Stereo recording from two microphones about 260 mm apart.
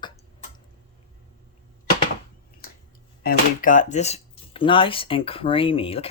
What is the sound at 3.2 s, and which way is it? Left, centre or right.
Speech, left.